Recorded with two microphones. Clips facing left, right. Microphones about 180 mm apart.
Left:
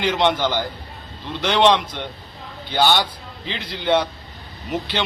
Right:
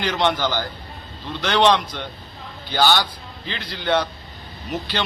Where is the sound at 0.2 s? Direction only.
20° left (ahead or behind).